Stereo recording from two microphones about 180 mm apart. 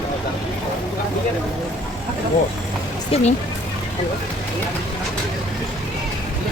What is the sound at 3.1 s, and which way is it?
Speech, 30° left (ahead or behind).